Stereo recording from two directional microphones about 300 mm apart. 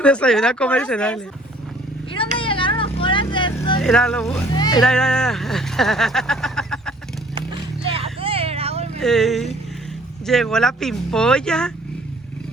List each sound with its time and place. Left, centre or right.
0.0 s speech: centre
2.1 s vehicle: centre
3.8 s speech: centre
4.5 s speech: centre
4.8 s speech: centre
7.9 s a sound: centre
9.0 s speech: centre